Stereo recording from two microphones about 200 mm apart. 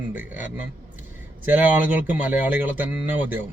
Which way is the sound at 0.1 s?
10° right (ahead or behind).